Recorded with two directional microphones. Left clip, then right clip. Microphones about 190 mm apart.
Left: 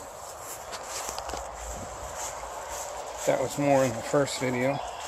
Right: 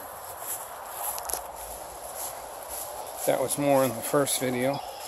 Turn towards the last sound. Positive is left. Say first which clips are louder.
# even
turn(degrees=-15)  # may be behind; listen again after turning